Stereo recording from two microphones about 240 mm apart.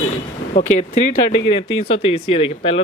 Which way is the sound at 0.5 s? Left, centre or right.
Centre.